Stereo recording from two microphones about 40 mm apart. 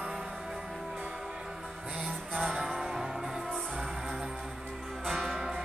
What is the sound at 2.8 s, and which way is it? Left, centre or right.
Music, centre.